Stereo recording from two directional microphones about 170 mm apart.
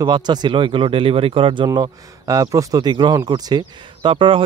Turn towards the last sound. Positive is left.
turn(degrees=-30)  # may be behind; listen again after turning